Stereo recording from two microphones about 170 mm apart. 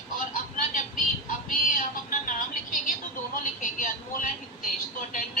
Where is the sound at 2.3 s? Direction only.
55° left (ahead or behind).